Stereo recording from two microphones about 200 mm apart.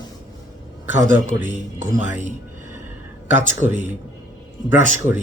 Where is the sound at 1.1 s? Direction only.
10° right (ahead or behind).